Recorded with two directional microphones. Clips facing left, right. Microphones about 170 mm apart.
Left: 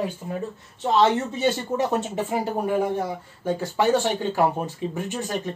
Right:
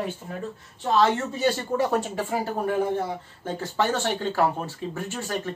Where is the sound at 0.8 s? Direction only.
20° left (ahead or behind).